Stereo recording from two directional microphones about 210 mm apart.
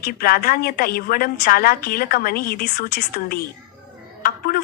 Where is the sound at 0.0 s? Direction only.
45° left (ahead or behind).